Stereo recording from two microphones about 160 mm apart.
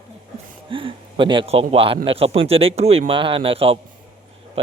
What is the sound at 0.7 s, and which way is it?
A man's voice, 35° right (ahead or behind).